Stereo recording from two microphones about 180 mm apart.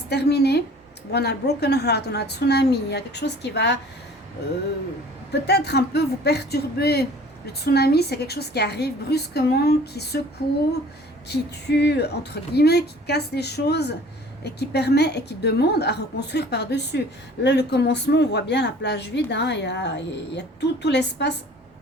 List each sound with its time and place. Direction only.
0.1 s a woman's voice: 65° left (ahead or behind)
5.3 s a woman's voice: 65° left (ahead or behind)
11.3 s a woman's voice: 70° left (ahead or behind)